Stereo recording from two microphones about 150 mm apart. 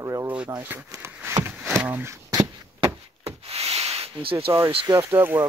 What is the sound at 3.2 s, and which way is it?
Rub, 40° right (ahead or behind).